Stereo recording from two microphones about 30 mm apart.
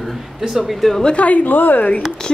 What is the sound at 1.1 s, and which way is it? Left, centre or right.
Speech, left.